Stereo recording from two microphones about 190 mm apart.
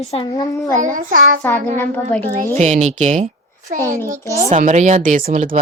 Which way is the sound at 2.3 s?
40° right (ahead or behind).